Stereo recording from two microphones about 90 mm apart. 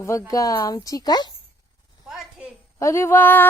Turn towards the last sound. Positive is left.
turn(degrees=20)  # may be behind; listen again after turning